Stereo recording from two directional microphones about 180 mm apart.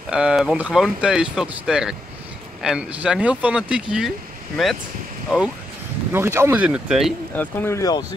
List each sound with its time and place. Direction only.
0.1 s speech: 5° right (ahead or behind)
6.1 s speech: 15° right (ahead or behind)
7.3 s speech: 15° left (ahead or behind)